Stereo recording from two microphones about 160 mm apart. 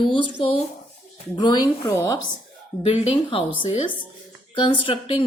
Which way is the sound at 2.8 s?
35° left (ahead or behind).